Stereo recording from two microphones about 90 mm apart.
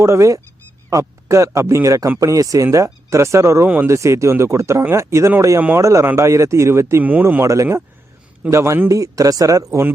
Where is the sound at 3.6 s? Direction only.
20° right (ahead or behind).